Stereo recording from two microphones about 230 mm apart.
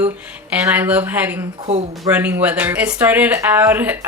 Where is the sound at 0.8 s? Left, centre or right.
Centre.